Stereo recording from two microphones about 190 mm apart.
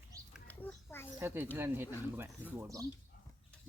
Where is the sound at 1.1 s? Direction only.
10° right (ahead or behind).